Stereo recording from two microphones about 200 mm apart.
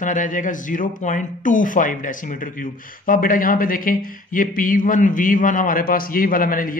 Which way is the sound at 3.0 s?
45° left (ahead or behind).